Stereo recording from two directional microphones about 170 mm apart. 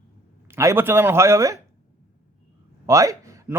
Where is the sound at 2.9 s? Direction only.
20° right (ahead or behind).